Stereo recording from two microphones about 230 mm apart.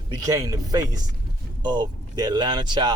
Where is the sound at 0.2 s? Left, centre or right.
Centre.